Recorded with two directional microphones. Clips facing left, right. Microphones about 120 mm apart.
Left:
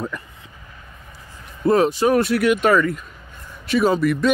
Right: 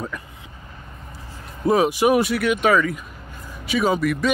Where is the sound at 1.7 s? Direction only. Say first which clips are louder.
Left 1 dB; 10° right (ahead or behind).